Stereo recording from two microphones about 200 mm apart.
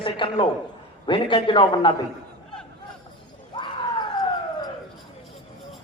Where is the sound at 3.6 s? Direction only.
20° left (ahead or behind).